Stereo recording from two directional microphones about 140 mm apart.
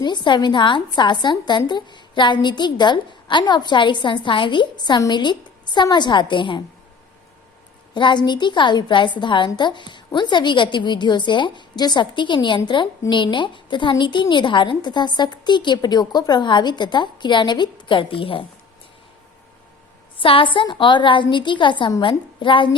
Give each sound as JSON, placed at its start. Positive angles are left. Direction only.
{"t": 0.0, "sound": "a woman's voice", "side_deg": 35}
{"t": 7.9, "sound": "a woman's voice", "side_deg": 35}
{"t": 20.1, "sound": "a woman's voice", "side_deg": 40}